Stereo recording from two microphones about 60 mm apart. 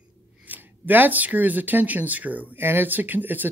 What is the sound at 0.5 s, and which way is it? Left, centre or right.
Speech, right.